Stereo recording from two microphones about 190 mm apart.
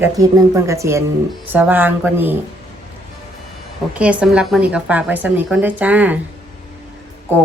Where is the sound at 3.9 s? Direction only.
5° right (ahead or behind).